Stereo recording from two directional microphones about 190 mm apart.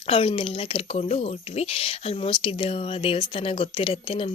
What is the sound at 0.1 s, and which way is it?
Speech, 30° left (ahead or behind).